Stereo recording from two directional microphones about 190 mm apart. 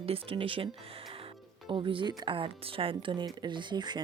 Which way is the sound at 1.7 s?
25° right (ahead or behind).